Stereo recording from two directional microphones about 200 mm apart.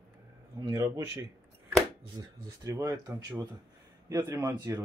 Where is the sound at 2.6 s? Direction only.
15° right (ahead or behind).